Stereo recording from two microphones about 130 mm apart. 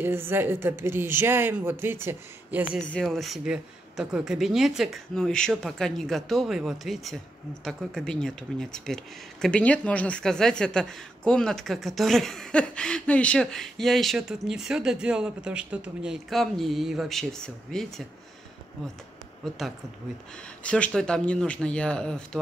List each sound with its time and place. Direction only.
0.0 s speech: 20° right (ahead or behind)
2.9 s speech: 5° left (ahead or behind)
19.4 s speech: centre (ahead or behind)
20.6 s speech: 10° left (ahead or behind)